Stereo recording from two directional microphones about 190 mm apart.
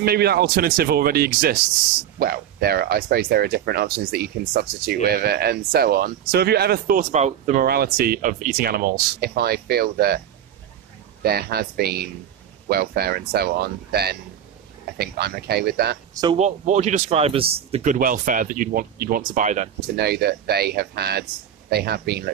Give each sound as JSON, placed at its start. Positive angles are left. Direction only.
{"t": 0.0, "sound": "speech", "side_deg": -55}
{"t": 7.6, "sound": "speech", "side_deg": -55}
{"t": 11.2, "sound": "speech", "side_deg": -55}
{"t": 16.3, "sound": "speech", "side_deg": -40}
{"t": 17.9, "sound": "speech", "side_deg": -45}
{"t": 20.0, "sound": "speech", "side_deg": -55}